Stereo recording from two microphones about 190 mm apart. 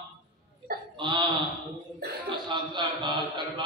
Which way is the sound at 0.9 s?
25° right (ahead or behind).